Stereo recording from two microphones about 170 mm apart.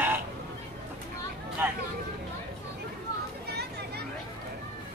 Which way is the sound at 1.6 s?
10° right (ahead or behind).